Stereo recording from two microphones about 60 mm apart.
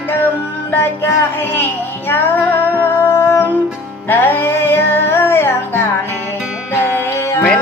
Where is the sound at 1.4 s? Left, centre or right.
Left.